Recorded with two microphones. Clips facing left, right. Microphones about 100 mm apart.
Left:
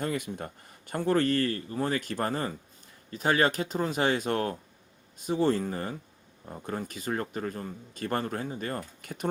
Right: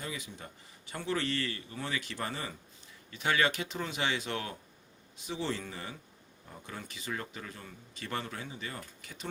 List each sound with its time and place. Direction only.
0.0 s speech: 55° left (ahead or behind)